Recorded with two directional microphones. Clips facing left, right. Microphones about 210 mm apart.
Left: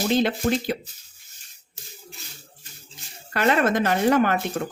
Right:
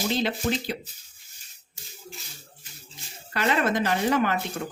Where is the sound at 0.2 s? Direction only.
50° left (ahead or behind).